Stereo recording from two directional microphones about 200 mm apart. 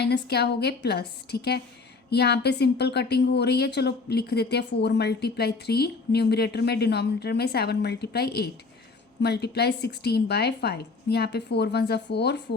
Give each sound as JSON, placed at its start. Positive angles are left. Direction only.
{"t": 0.0, "sound": "a woman's voice", "side_deg": 55}